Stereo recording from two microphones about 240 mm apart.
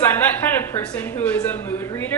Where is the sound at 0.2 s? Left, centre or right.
Centre.